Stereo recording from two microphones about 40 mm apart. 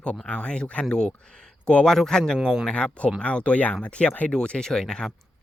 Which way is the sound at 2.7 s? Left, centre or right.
Left.